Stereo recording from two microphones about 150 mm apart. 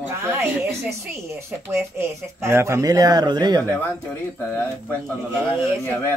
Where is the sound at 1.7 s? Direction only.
20° right (ahead or behind).